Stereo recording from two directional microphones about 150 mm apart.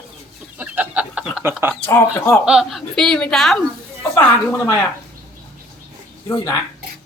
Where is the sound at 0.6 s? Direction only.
10° right (ahead or behind).